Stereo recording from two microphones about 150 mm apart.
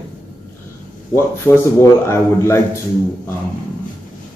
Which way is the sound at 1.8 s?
20° left (ahead or behind).